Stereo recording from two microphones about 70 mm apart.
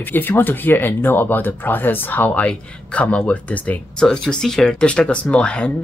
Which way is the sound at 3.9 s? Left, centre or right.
Centre.